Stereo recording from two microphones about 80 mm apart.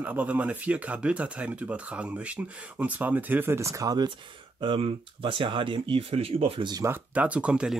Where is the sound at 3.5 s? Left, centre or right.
Right.